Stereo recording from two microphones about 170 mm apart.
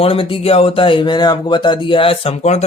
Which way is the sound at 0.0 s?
30° left (ahead or behind).